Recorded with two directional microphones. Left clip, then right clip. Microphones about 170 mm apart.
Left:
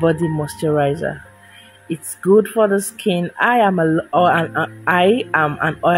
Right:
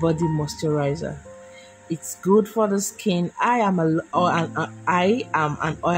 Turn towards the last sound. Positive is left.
turn(degrees=10)  # may be behind; listen again after turning